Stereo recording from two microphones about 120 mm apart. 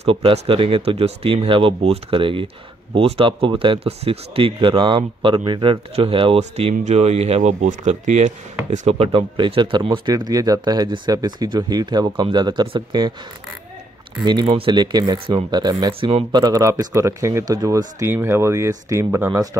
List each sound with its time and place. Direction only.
0.0 s speech: 55° right (ahead or behind)
6.5 s speech: 70° right (ahead or behind)
8.7 s speech: 60° right (ahead or behind); by 13.1 s 40° right (ahead or behind)
14.4 s speech: 50° right (ahead or behind); by 19.5 s 25° right (ahead or behind)